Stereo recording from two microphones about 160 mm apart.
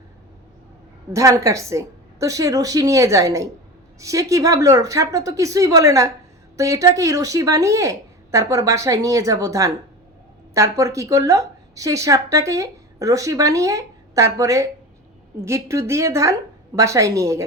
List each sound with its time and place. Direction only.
1.1 s a woman's voice: 20° right (ahead or behind)